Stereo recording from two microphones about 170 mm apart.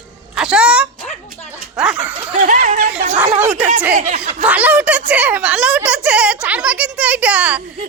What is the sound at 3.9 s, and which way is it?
Speech, 45° right (ahead or behind).